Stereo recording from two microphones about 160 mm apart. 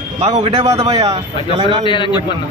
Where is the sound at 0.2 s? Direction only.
35° right (ahead or behind).